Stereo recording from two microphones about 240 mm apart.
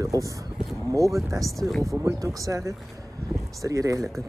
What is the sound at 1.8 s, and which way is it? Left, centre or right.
Speech, centre.